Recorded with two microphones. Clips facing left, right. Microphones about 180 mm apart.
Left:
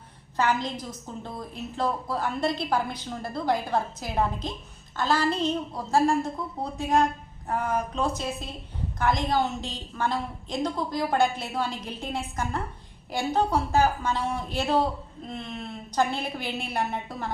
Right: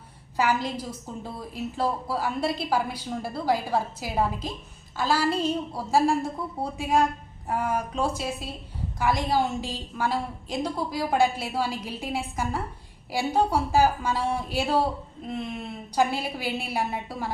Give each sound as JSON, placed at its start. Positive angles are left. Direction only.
{"t": 0.3, "sound": "a woman's voice", "side_deg": -5}